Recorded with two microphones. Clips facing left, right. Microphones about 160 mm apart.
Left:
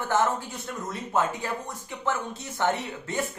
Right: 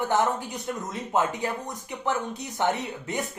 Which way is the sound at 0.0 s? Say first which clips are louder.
Right 1 dB; 20° right (ahead or behind).